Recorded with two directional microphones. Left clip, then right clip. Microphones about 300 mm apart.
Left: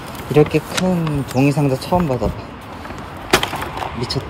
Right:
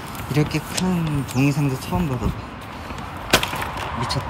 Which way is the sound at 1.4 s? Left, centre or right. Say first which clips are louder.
Left 5 dB; right.